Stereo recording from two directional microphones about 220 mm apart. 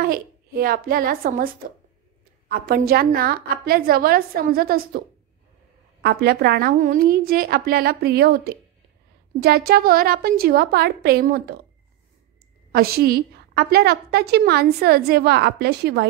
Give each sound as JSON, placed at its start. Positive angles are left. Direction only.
{"t": 0.0, "sound": "a woman's voice", "side_deg": -40}
{"t": 6.0, "sound": "a woman's voice", "side_deg": -45}
{"t": 12.7, "sound": "a woman's voice", "side_deg": -45}